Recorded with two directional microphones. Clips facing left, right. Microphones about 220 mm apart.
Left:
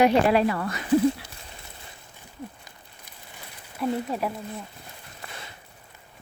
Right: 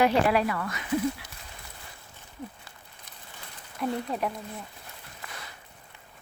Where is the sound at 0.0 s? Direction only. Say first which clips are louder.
Left 4 dB; 25° left (ahead or behind).